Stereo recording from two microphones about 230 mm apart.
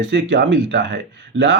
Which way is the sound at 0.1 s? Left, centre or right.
Right.